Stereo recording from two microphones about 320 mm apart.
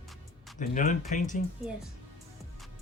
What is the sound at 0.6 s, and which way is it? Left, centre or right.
Speech, left.